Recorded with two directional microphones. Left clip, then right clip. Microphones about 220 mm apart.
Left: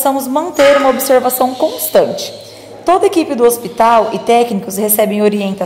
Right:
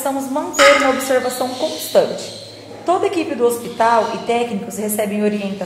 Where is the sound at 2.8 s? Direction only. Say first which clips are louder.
Left 6 dB; 35° left (ahead or behind).